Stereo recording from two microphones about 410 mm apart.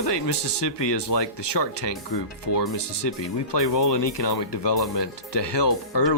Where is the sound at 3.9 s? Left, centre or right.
Left.